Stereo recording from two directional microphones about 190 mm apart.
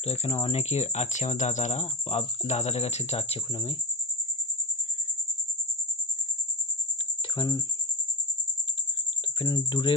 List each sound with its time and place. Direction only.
0.0 s speech: 35° left (ahead or behind)
7.3 s speech: 20° left (ahead or behind)
9.4 s speech: 25° left (ahead or behind)